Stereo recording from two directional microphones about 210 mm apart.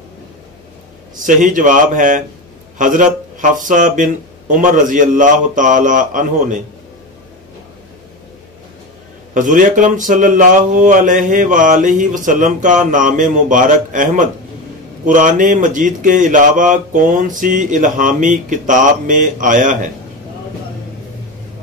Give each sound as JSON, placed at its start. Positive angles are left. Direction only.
{"t": 1.2, "sound": "speech", "side_deg": -40}
{"t": 9.3, "sound": "speech", "side_deg": -40}